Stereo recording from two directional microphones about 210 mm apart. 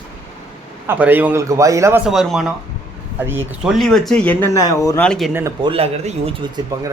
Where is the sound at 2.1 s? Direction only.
Centre (ahead or behind); by 5.1 s 15° left (ahead or behind).